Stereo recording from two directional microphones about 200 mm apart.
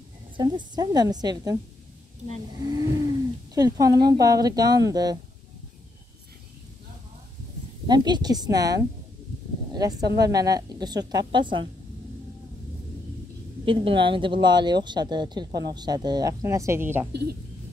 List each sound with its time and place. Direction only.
0.4 s speech: 20° right (ahead or behind)
2.6 s speech: 20° right (ahead or behind)
7.8 s speech: 20° right (ahead or behind)
13.7 s speech: 25° right (ahead or behind)
17.1 s speech: 55° right (ahead or behind)